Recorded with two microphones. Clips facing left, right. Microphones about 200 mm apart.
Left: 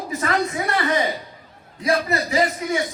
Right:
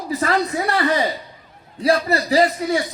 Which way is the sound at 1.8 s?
35° right (ahead or behind).